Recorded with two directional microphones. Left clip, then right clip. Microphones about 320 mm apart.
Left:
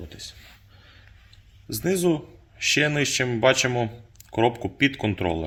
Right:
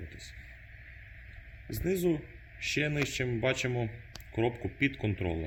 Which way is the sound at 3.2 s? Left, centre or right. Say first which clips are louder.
Left 9 dB; left.